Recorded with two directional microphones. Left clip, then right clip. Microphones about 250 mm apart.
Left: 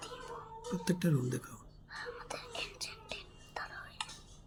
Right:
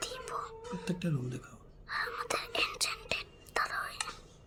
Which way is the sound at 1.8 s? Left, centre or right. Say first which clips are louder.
Right 9 dB; right.